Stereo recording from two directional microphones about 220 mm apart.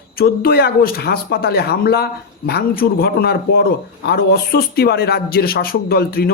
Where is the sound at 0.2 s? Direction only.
45° left (ahead or behind).